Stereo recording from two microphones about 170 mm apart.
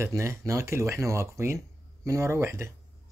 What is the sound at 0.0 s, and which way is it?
Speech, 15° right (ahead or behind).